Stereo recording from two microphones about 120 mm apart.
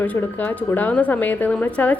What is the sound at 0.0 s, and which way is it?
A woman's voice, 15° left (ahead or behind).